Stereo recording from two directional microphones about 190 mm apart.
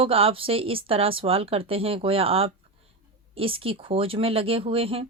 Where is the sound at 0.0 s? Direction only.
30° right (ahead or behind).